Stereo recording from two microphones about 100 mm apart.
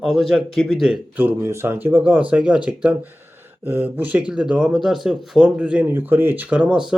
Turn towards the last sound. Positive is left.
turn(degrees=-10)  # may be behind; listen again after turning